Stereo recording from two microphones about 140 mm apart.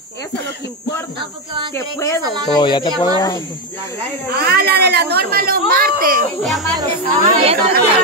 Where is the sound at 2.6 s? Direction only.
35° left (ahead or behind).